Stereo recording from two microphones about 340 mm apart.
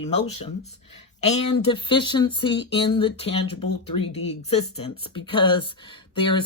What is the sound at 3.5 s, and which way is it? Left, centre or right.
Speech, left.